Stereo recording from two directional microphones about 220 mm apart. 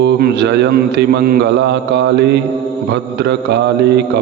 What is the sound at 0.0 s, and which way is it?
Mantra, 50° right (ahead or behind).